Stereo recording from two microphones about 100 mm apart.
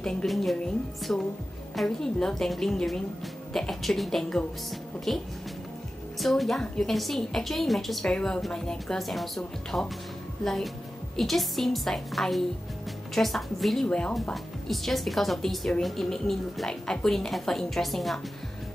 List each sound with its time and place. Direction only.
0.0 s a woman's voice: 5° left (ahead or behind)
1.1 s a woman's voice: 15° left (ahead or behind)